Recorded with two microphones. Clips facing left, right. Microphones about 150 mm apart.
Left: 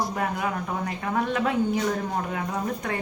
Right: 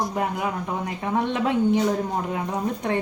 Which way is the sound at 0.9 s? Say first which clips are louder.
Right 2 dB; 20° right (ahead or behind).